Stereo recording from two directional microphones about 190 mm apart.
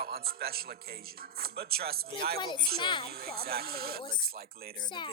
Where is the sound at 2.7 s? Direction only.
25° left (ahead or behind).